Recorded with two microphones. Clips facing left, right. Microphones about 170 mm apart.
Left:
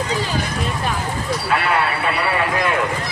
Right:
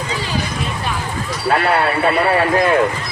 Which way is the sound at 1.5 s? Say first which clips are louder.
Right 6 dB; 40° right (ahead or behind).